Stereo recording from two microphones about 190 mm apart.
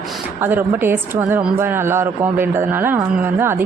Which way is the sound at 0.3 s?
10° right (ahead or behind).